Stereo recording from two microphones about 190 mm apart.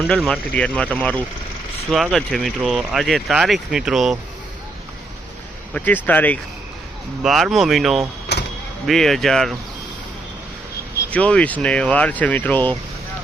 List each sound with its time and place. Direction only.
0.1 s speech: 5° left (ahead or behind)
5.7 s speech: 10° left (ahead or behind)
8.3 s a sound: 60° left (ahead or behind)
8.9 s speech: centre (ahead or behind)
10.9 s speech: 5° left (ahead or behind)